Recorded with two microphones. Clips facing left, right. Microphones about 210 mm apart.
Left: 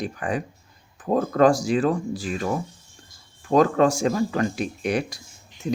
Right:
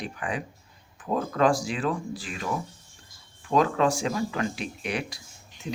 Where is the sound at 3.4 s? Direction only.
45° left (ahead or behind).